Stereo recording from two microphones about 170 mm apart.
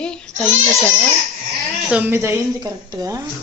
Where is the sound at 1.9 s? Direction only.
10° right (ahead or behind).